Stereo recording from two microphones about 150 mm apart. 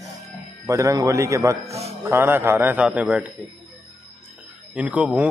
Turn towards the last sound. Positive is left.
turn(degrees=-10)  # may be behind; listen again after turning